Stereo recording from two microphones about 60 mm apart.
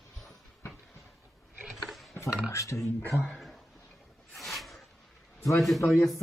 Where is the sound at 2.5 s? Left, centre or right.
Left.